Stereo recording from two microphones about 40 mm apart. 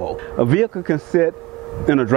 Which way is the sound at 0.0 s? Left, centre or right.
Centre.